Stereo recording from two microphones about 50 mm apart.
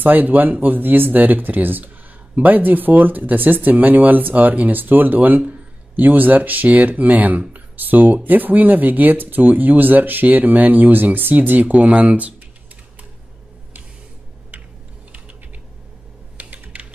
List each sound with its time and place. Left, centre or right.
0.0 s speech: right
16.3 s typing: right